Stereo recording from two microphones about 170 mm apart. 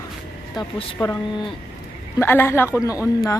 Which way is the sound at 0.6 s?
25° left (ahead or behind).